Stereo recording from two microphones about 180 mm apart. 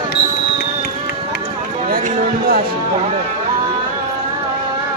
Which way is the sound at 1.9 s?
55° right (ahead or behind).